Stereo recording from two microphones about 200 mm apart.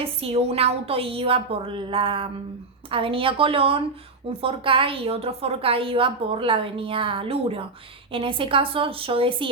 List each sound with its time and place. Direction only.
0.0 s a woman's voice: 30° right (ahead or behind)